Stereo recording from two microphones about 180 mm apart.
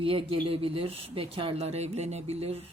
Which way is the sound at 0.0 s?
30° right (ahead or behind).